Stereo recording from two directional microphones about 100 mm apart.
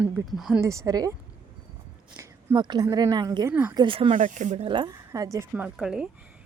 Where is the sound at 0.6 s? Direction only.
30° right (ahead or behind).